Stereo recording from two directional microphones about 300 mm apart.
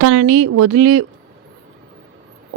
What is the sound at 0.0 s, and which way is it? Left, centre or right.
Speech, right.